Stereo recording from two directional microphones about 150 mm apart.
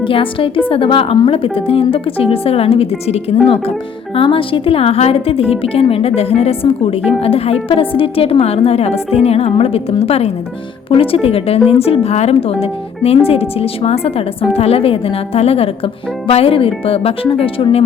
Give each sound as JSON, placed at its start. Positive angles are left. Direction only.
{"t": 0.0, "sound": "speech", "side_deg": 35}